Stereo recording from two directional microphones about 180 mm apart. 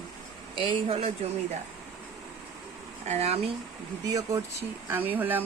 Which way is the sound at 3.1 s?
35° right (ahead or behind).